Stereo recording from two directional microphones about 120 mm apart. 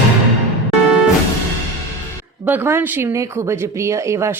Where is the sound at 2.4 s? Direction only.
15° right (ahead or behind).